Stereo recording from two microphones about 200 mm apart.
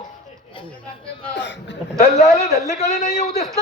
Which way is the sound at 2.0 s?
35° left (ahead or behind).